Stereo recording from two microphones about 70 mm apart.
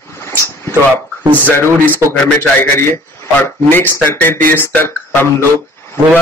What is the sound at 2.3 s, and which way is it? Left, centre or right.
A man's voice, left.